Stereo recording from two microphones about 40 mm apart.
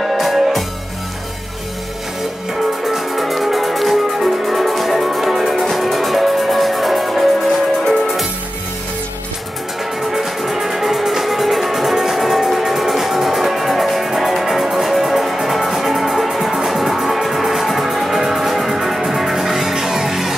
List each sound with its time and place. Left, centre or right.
0.0 s music: centre
2.8 s music: centre
7.8 s music: centre
10.1 s music: centre